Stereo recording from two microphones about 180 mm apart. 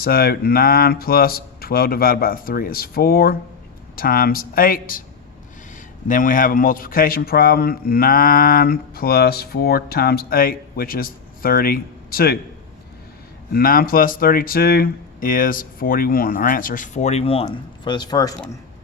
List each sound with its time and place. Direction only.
0.0 s a man's voice: 55° left (ahead or behind)
6.1 s a man's voice: 50° left (ahead or behind)
13.5 s speech: 55° left (ahead or behind); by 18.3 s 20° left (ahead or behind)